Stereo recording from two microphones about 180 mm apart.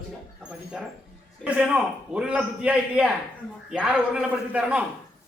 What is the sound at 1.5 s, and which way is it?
A man's voice, 5° right (ahead or behind).